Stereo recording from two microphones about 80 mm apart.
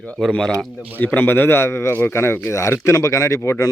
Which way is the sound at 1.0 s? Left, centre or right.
Left.